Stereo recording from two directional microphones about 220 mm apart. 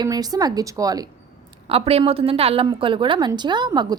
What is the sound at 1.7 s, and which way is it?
A woman's voice, 25° right (ahead or behind).